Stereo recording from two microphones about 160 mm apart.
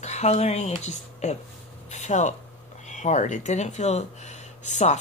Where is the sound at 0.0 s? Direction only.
45° left (ahead or behind).